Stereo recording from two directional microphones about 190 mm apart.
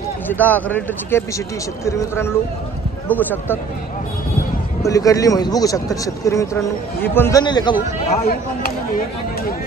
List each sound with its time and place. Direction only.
0.3 s a man's voice: 10° left (ahead or behind)
4.8 s a man's voice: 15° left (ahead or behind)